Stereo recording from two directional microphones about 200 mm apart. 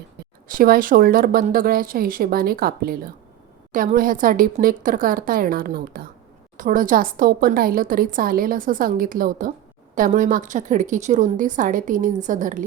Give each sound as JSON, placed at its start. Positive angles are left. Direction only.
{"t": 0.4, "sound": "a woman's voice", "side_deg": -45}